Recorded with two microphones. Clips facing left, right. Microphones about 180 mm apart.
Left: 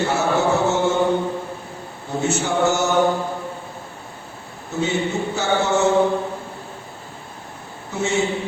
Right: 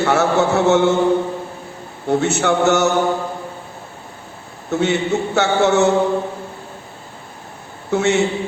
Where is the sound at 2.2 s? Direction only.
70° right (ahead or behind).